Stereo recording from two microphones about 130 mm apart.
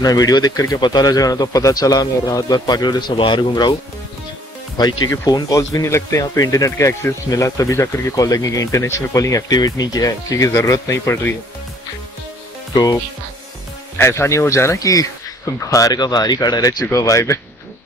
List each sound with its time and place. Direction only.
0.0 s speech: 30° left (ahead or behind)
4.7 s speech: 30° left (ahead or behind)
13.9 s speech: 20° left (ahead or behind)